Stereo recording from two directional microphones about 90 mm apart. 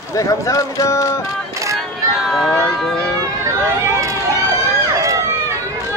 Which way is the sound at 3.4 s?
35° right (ahead or behind).